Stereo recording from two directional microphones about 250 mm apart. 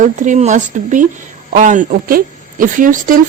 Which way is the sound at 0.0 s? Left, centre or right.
Right.